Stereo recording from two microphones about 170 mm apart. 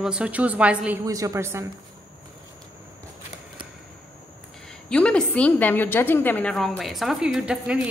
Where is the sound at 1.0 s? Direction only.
20° right (ahead or behind).